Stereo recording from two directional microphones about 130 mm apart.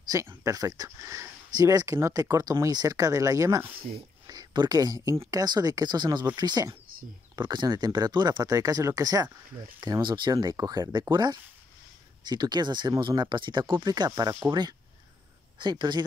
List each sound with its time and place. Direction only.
0.4 s speech: 25° right (ahead or behind)